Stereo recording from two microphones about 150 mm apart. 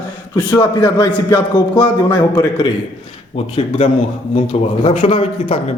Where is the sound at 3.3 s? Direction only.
40° left (ahead or behind).